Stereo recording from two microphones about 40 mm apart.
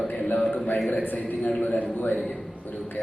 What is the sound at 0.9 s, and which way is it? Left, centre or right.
A man's voice, left.